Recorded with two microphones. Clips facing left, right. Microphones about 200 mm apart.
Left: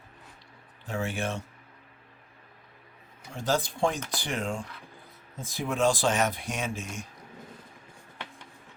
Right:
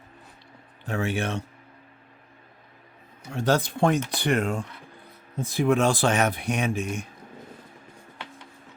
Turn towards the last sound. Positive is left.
turn(degrees=-60)  # may be behind; listen again after turning